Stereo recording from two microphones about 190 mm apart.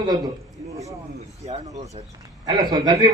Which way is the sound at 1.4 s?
35° right (ahead or behind).